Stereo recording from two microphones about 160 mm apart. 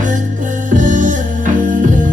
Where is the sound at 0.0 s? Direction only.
55° right (ahead or behind).